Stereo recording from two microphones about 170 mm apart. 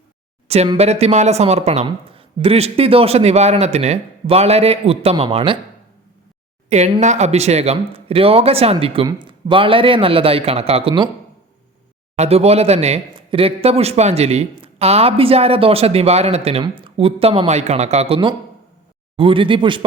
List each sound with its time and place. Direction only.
0.4 s a sound: 40° right (ahead or behind)
0.8 s speech: 40° right (ahead or behind)
6.7 s speech: 40° right (ahead or behind)
12.1 s speech: 40° right (ahead or behind)